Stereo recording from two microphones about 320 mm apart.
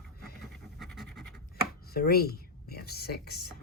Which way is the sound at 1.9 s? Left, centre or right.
Left.